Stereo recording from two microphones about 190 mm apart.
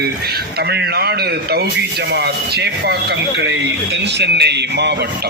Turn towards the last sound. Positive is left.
turn(degrees=-60)  # may be behind; listen again after turning